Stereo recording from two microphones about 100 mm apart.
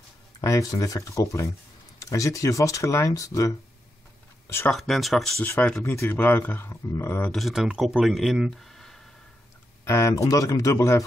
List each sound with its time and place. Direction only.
0.4 s speech: 35° left (ahead or behind)
4.6 s speech: centre (ahead or behind)
5.9 s speech: 25° left (ahead or behind)
7.3 s speech: centre (ahead or behind)
9.8 s speech: 30° left (ahead or behind)